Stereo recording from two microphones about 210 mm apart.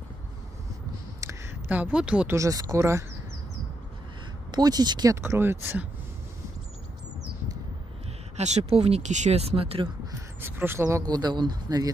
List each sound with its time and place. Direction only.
1.2 s speech: 10° right (ahead or behind)
4.5 s speech: 20° right (ahead or behind)
8.4 s speech: 30° right (ahead or behind)
10.4 s speech: 10° right (ahead or behind)